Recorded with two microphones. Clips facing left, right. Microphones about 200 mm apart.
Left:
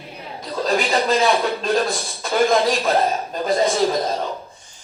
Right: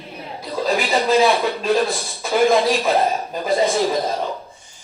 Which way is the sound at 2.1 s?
Centre (ahead or behind).